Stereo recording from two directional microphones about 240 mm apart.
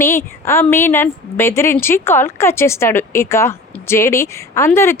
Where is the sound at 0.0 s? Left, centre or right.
Centre.